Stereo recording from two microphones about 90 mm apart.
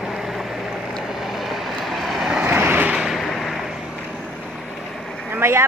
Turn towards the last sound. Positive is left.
turn(degrees=-25)  # may be behind; listen again after turning